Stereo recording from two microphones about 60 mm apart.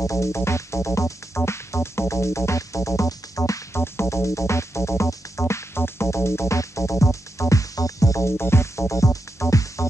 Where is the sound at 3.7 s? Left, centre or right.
Left.